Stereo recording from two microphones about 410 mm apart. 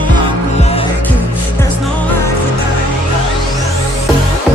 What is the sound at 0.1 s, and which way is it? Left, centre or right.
Music, centre.